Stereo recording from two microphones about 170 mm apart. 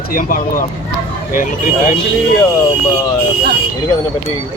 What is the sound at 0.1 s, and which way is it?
Speech, 55° left (ahead or behind).